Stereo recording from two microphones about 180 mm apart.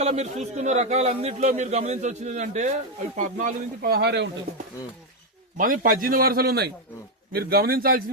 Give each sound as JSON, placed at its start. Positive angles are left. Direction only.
{"t": 0.0, "sound": "a man's voice", "side_deg": -40}
{"t": 5.5, "sound": "a man's voice", "side_deg": -50}